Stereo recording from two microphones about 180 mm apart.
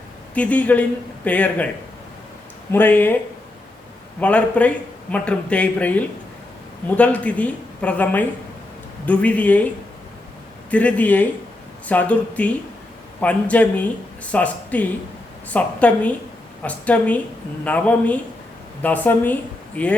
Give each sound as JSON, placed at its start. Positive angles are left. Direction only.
{"t": 0.3, "sound": "speech", "side_deg": 5}
{"t": 2.7, "sound": "speech", "side_deg": 10}
{"t": 4.2, "sound": "speech", "side_deg": 5}
{"t": 10.7, "sound": "speech", "side_deg": 5}